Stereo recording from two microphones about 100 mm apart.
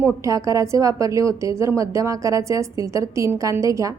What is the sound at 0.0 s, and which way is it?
A woman's voice, 30° right (ahead or behind).